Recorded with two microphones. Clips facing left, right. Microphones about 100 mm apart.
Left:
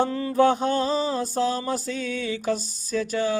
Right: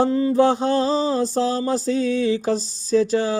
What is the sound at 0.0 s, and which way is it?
Mantra, 25° right (ahead or behind).